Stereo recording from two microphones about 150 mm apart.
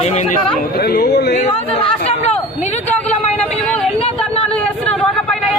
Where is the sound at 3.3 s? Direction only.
5° left (ahead or behind).